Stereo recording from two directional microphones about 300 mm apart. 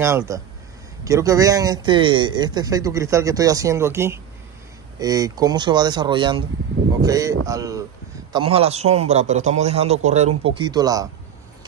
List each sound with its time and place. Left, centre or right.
0.0 s a man's voice: centre